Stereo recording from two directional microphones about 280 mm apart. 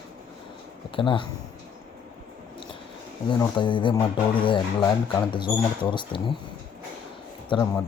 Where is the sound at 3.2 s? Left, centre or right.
Centre.